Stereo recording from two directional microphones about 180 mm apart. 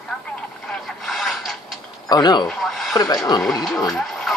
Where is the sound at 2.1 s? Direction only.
25° left (ahead or behind).